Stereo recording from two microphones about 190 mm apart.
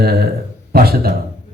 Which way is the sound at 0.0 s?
55° right (ahead or behind).